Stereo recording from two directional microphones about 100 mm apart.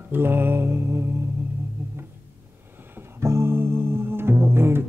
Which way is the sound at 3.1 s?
25° right (ahead or behind).